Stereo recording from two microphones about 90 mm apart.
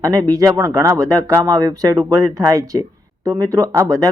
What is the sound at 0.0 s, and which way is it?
Speech, 40° right (ahead or behind).